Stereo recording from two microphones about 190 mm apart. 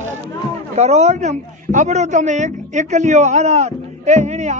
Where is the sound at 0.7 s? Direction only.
35° right (ahead or behind).